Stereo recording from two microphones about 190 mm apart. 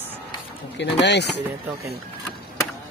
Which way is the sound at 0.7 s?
65° left (ahead or behind).